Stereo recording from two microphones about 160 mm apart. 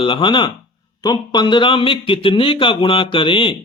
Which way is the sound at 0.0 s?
30° left (ahead or behind).